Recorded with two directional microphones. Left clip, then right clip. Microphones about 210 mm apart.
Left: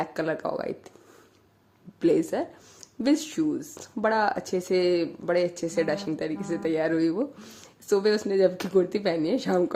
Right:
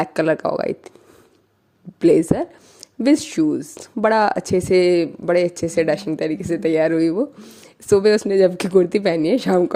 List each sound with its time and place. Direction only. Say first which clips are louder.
0.0 s speech: right 10 dB; 35° right (ahead or behind)
2.0 s speech: right 8 dB; 35° right (ahead or behind)